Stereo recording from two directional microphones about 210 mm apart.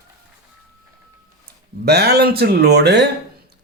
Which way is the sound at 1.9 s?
50° right (ahead or behind).